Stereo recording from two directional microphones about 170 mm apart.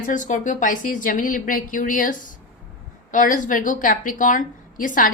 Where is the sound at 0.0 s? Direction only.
50° left (ahead or behind).